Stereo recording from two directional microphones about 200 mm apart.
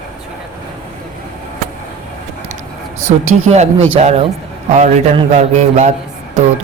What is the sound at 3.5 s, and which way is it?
A man's voice, 35° right (ahead or behind).